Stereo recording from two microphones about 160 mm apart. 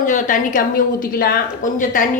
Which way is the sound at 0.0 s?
55° left (ahead or behind).